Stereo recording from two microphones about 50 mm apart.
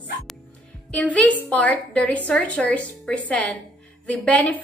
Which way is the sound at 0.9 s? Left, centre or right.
Left.